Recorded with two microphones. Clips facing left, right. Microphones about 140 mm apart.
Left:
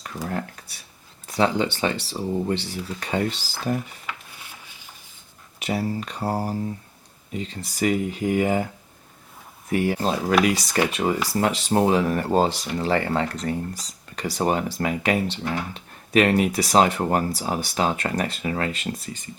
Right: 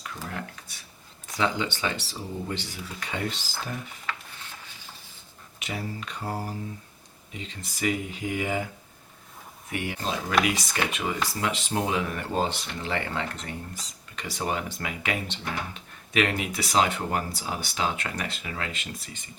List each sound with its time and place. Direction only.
0.2 s speech: 40° left (ahead or behind)
4.0 s a sound: 10° left (ahead or behind)
5.6 s speech: 35° left (ahead or behind)
9.6 s speech: 40° left (ahead or behind)